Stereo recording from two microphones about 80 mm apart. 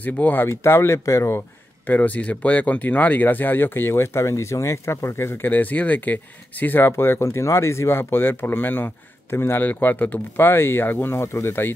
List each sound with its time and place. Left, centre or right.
0.0 s speech: left
1.9 s speech: centre